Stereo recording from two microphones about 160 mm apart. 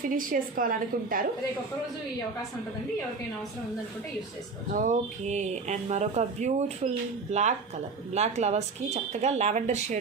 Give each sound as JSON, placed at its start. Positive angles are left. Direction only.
{"t": 0.1, "sound": "a woman's voice", "side_deg": -60}
{"t": 4.7, "sound": "speech", "side_deg": -55}